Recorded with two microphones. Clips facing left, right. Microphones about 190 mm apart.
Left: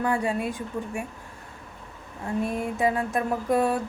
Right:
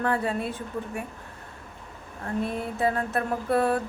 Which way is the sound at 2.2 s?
15° left (ahead or behind).